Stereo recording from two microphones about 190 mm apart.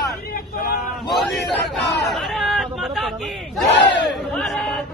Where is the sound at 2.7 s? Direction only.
Centre (ahead or behind).